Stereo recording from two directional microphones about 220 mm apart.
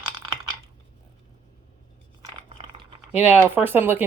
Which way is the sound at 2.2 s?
25° right (ahead or behind).